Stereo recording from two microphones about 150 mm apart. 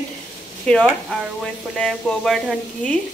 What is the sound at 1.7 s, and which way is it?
Frying, 5° left (ahead or behind).